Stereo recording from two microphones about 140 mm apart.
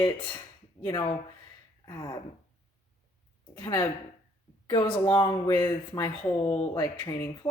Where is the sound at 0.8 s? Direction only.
30° left (ahead or behind).